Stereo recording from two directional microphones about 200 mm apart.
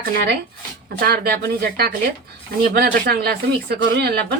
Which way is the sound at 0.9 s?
50° right (ahead or behind).